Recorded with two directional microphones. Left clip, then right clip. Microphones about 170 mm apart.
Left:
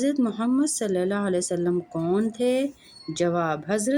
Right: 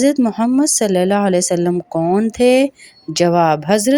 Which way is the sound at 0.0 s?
45° right (ahead or behind).